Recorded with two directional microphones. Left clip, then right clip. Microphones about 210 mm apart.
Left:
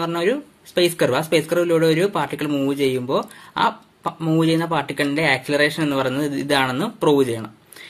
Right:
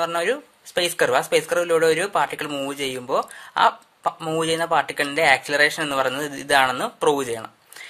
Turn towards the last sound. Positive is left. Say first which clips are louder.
# left 1 dB
turn(degrees=-25)  # may be behind; listen again after turning